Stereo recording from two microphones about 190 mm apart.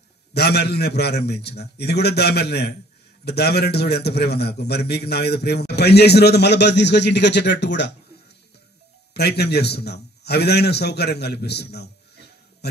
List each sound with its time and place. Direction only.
0.3 s a man's voice: 60° left (ahead or behind)
9.1 s a man's voice: 60° left (ahead or behind)